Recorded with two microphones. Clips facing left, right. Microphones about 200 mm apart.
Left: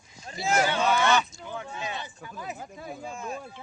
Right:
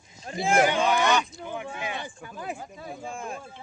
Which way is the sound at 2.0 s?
50° right (ahead or behind).